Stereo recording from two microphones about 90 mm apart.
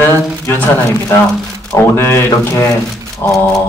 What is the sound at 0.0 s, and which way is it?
Speech, 25° left (ahead or behind).